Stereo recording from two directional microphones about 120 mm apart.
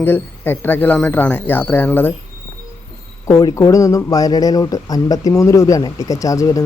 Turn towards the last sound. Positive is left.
turn(degrees=30)  # may be behind; listen again after turning